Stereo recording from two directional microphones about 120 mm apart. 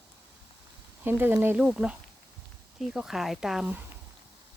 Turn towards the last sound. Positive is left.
turn(degrees=-5)  # may be behind; listen again after turning